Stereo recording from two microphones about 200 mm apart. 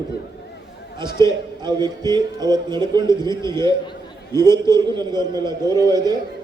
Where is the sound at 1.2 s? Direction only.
20° right (ahead or behind).